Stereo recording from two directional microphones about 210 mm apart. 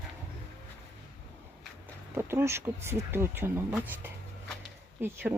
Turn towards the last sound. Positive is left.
turn(degrees=-10)  # may be behind; listen again after turning